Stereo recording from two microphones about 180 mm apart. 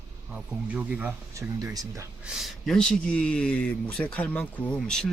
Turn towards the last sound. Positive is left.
turn(degrees=5)  # may be behind; listen again after turning